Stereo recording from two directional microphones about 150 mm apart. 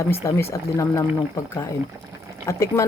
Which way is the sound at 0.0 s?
20° left (ahead or behind).